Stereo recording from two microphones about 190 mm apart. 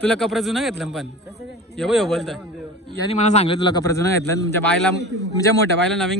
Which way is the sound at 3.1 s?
35° left (ahead or behind).